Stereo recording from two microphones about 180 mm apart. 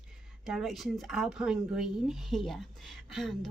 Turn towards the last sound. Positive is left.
turn(degrees=0)  # may be behind; listen again after turning